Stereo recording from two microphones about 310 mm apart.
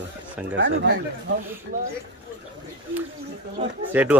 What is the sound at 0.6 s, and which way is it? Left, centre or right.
Speech, right.